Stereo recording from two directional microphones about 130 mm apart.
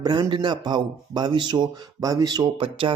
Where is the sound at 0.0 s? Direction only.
30° right (ahead or behind).